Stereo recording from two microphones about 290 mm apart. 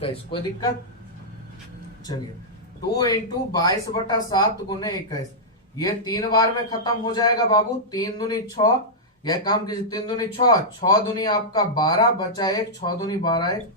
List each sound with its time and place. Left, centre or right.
0.0 s speech: centre
2.9 s speech: centre